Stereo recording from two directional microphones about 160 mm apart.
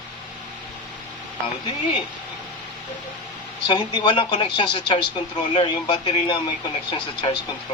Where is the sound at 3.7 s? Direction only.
30° left (ahead or behind).